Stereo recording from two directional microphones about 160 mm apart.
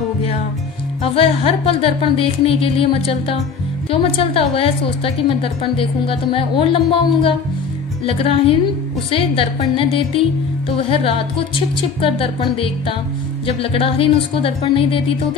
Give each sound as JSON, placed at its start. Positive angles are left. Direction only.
{"t": 1.1, "sound": "a woman's voice", "side_deg": 35}